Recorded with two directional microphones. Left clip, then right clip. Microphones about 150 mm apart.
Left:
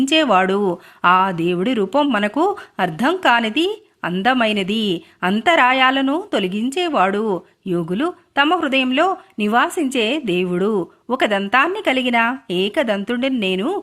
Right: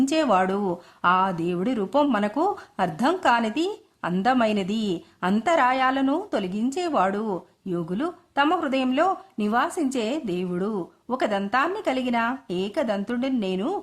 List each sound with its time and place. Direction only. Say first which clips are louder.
0.1 s a woman's voice: left 6 dB; 15° left (ahead or behind)
2.0 s speech: left 3 dB; 5° left (ahead or behind)
2.2 s a woman's voice: left 6 dB; 15° left (ahead or behind)